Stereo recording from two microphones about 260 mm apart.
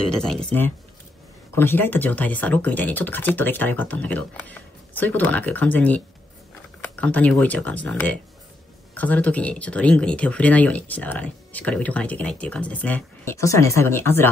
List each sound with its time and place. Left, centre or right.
0.0 s speech: centre